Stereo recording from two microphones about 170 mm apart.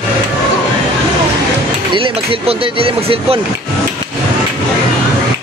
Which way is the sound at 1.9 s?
30° right (ahead or behind).